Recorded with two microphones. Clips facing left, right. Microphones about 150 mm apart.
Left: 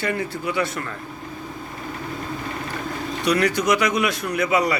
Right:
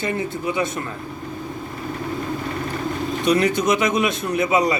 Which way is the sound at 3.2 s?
20° right (ahead or behind).